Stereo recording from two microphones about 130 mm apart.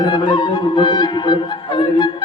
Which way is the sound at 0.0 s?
35° left (ahead or behind).